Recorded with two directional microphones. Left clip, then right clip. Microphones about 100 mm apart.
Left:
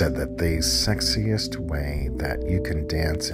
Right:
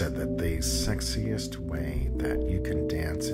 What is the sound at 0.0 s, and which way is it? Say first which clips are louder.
Speech: left 6 dB; 45° left (ahead or behind).